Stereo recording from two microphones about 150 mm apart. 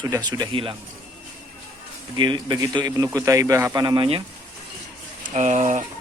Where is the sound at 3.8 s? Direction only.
35° right (ahead or behind).